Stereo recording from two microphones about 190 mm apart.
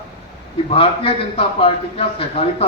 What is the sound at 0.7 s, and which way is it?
A man's voice, 30° left (ahead or behind).